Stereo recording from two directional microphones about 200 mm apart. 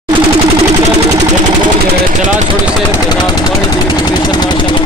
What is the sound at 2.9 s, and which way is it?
Speech, 20° left (ahead or behind).